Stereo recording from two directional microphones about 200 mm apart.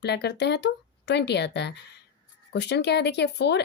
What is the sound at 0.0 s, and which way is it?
Speech, 55° left (ahead or behind).